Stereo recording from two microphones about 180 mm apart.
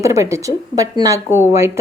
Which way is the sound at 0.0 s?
15° right (ahead or behind).